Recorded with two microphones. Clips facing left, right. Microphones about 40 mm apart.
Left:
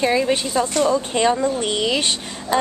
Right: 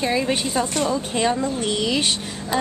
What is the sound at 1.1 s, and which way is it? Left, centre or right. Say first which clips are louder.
Speech: left 3 dB; centre.